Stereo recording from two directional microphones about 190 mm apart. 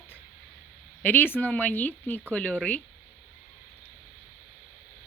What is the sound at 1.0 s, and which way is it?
Speech, 10° left (ahead or behind).